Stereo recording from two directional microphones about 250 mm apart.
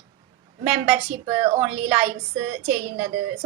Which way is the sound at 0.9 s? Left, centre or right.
Right.